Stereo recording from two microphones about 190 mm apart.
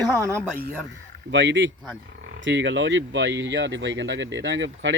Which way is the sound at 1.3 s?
70° right (ahead or behind).